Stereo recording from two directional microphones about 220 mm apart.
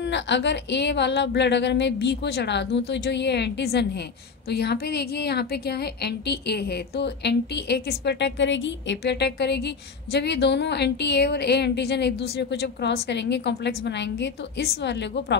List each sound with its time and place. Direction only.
0.0 s a woman's voice: 55° left (ahead or behind)